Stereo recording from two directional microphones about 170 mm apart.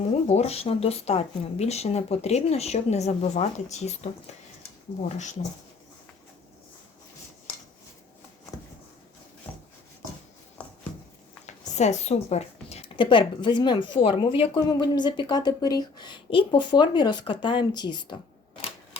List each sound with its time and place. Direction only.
0.3 s speech: 40° left (ahead or behind)
10.6 s a sound: 5° left (ahead or behind)
11.4 s a woman's voice: 40° left (ahead or behind)